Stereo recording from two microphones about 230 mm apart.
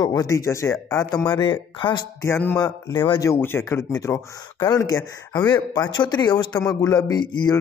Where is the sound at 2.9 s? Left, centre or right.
Left.